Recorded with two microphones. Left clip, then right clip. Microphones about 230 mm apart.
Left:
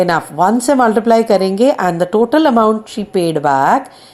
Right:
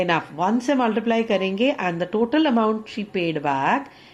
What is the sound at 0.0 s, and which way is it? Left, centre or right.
Speech, left.